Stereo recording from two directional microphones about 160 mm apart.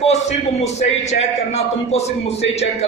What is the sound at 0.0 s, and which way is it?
A man's voice, 45° left (ahead or behind).